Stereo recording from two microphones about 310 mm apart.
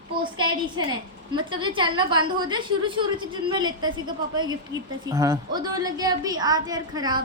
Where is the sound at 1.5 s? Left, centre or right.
Centre.